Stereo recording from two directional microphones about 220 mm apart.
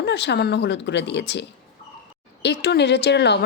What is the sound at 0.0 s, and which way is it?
A woman's voice, 50° left (ahead or behind).